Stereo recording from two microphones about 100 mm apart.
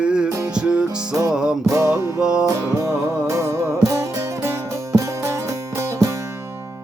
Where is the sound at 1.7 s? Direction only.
25° right (ahead or behind).